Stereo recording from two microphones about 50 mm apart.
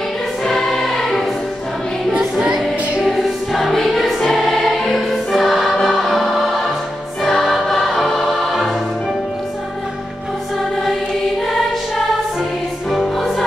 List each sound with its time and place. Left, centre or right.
0.5 s choir: centre
2.1 s music: centre
3.0 s music: centre
7.2 s choir: centre
12.9 s music: centre